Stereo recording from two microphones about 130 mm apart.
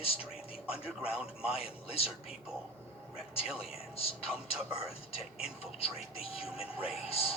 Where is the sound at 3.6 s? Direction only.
50° left (ahead or behind).